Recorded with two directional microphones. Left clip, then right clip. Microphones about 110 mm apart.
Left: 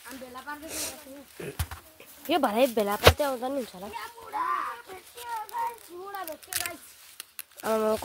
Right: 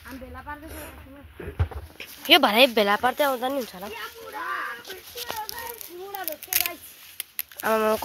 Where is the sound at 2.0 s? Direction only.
5° right (ahead or behind).